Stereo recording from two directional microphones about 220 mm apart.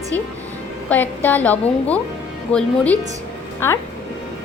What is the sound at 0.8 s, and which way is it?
A woman's voice, 10° left (ahead or behind).